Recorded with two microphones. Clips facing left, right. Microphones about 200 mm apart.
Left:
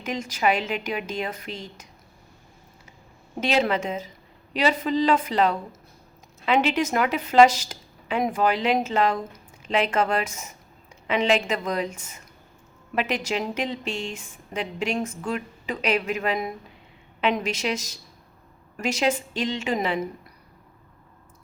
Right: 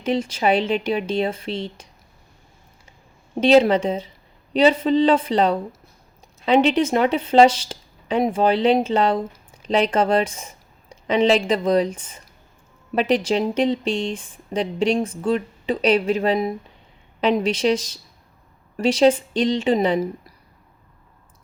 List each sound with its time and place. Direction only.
0.0 s a woman's voice: 30° right (ahead or behind)
3.4 s a woman's voice: 35° right (ahead or behind)